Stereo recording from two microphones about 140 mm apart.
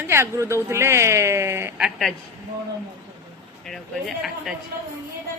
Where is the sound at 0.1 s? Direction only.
20° right (ahead or behind).